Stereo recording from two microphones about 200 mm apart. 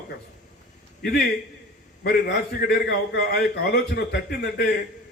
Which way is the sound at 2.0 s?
55° left (ahead or behind).